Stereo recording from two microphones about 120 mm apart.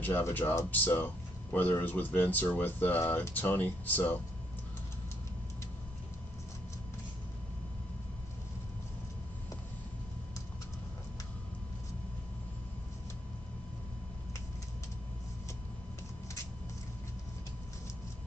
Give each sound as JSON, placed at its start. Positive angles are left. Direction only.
{"t": 0.0, "sound": "a man's voice", "side_deg": 15}